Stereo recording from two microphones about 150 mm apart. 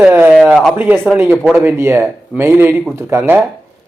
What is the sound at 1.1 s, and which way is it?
Speech, 15° right (ahead or behind).